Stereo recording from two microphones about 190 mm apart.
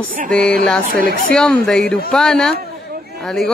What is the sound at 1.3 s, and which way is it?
Speech, 5° left (ahead or behind).